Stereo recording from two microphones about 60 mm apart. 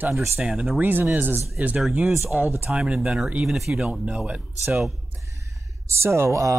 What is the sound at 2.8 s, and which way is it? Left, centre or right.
Speech, centre.